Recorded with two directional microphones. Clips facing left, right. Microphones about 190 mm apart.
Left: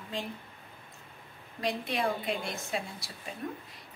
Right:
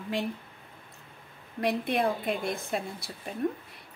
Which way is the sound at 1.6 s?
60° right (ahead or behind).